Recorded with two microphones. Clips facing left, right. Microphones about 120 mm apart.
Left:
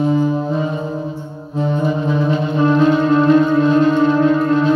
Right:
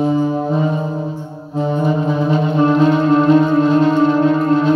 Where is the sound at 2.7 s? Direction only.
15° right (ahead or behind).